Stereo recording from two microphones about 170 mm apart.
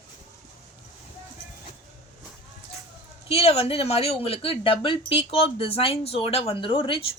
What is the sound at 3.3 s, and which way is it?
Speech, 35° left (ahead or behind).